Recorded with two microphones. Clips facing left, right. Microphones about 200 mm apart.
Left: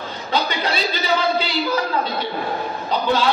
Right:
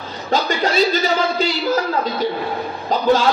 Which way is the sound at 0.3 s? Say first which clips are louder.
Right 4 dB; 45° right (ahead or behind).